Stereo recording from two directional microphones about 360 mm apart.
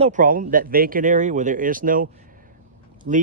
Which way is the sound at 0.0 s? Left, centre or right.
Right.